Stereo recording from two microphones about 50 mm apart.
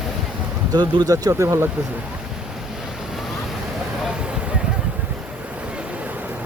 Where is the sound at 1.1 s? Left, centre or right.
Right.